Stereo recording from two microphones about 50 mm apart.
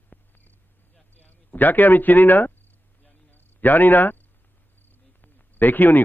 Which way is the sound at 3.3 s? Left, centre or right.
Left.